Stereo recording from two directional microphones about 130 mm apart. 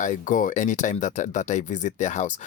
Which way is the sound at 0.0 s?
85° left.